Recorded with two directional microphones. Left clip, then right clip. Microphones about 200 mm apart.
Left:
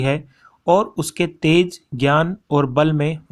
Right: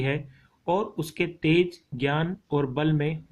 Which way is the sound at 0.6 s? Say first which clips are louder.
Left 10 dB; 40° left (ahead or behind).